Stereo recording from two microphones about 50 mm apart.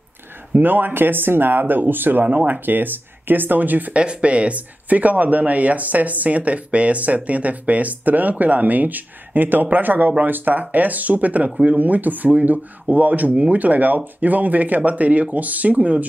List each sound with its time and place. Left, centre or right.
0.6 s speech: right
2.2 s speech: right
3.9 s speech: right